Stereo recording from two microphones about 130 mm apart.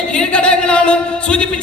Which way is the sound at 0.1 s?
10° left (ahead or behind).